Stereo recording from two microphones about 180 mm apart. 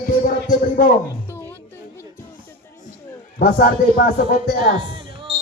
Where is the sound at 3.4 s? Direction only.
55° left (ahead or behind).